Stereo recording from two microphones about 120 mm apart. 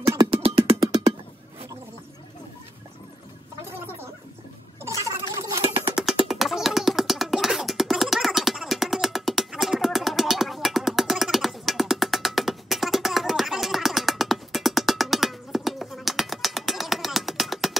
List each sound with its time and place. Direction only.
0.2 s music: 45° right (ahead or behind)
4.8 s gargling: 25° right (ahead or behind)
6.2 s a sound: centre (ahead or behind)